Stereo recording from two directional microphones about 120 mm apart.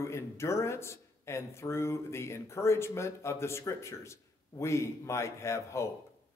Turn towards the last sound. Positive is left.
turn(degrees=25)  # may be behind; listen again after turning